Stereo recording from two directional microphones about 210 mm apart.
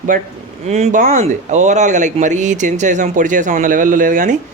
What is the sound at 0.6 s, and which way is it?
Speech, 30° right (ahead or behind).